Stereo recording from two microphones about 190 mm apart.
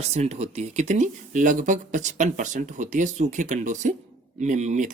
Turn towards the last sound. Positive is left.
turn(degrees=-40)  # may be behind; listen again after turning